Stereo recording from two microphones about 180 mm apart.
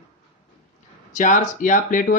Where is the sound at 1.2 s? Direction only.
45° left (ahead or behind).